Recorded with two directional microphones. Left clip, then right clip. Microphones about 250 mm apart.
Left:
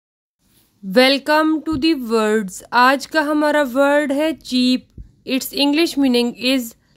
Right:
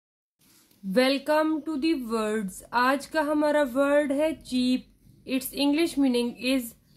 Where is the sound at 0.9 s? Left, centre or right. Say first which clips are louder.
Left 9 dB; left.